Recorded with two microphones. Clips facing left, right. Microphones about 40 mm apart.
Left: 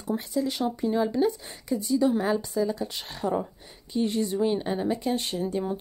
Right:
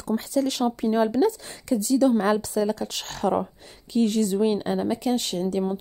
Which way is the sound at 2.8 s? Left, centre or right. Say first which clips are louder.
Right 4 dB; right.